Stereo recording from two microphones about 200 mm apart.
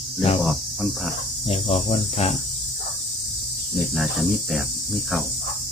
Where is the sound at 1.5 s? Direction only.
30° left (ahead or behind).